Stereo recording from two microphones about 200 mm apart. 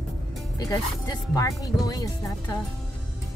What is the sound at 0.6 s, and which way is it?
Speech, 15° left (ahead or behind).